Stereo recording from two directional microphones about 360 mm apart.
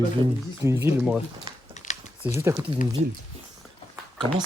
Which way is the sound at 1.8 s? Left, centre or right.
Centre.